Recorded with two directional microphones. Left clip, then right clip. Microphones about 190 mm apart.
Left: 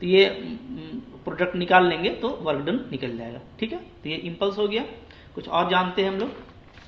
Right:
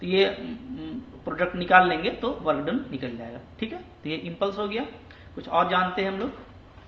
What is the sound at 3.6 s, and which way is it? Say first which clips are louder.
A man's voice: left 3 dB; 15° left (ahead or behind).